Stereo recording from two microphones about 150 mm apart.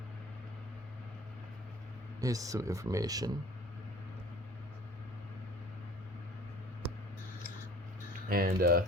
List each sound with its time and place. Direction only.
2.2 s speech: 25° right (ahead or behind)
8.3 s speech: 75° right (ahead or behind)